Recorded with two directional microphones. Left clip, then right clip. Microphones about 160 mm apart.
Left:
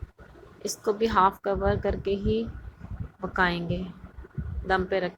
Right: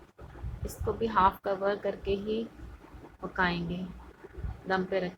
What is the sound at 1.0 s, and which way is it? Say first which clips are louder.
A woman's voice: left 3 dB; 25° left (ahead or behind).